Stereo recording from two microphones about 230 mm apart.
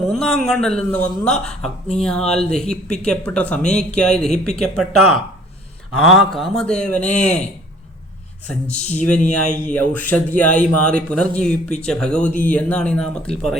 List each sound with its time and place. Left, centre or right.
0.1 s speech: centre
8.7 s speech: left
9.0 s speech: centre